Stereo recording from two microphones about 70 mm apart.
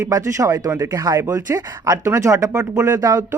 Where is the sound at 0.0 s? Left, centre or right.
Right.